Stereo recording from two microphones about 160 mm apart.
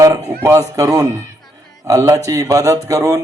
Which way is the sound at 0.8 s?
20° right (ahead or behind).